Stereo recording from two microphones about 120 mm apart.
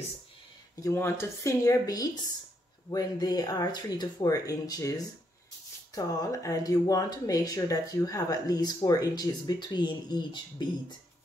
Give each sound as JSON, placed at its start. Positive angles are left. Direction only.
{"t": 0.7, "sound": "speech", "side_deg": 25}